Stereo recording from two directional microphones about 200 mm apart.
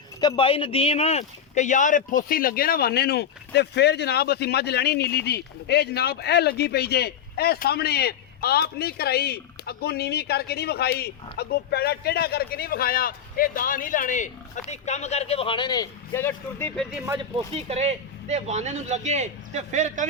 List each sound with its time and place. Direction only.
0.2 s speech: 25° left (ahead or behind)
17.5 s a man's voice: 30° right (ahead or behind)